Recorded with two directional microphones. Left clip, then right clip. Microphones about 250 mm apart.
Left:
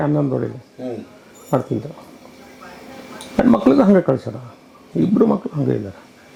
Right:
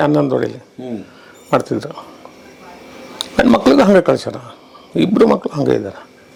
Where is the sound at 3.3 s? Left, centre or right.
Centre.